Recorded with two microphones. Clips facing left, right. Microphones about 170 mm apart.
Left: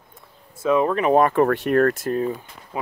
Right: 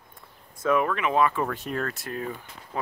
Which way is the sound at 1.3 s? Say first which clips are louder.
Left 11 dB; 65° left (ahead or behind).